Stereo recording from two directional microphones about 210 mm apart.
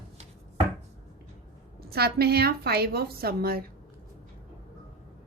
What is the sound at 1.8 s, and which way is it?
A woman's voice, 50° right (ahead or behind).